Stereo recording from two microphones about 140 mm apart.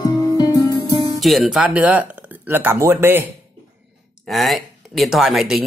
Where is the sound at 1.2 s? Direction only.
Centre (ahead or behind); by 3.3 s 15° right (ahead or behind).